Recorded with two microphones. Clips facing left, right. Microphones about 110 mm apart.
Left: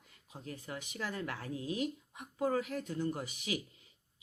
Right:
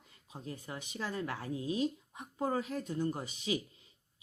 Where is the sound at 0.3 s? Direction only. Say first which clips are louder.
Right 1 dB; 20° right (ahead or behind).